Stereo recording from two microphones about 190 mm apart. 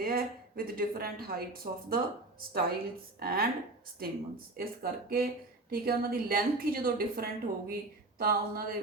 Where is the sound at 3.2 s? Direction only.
50° right (ahead or behind).